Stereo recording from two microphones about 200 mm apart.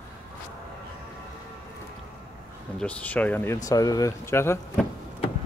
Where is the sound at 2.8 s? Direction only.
5° left (ahead or behind).